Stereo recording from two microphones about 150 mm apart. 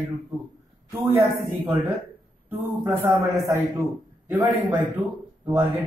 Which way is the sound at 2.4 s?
15° right (ahead or behind).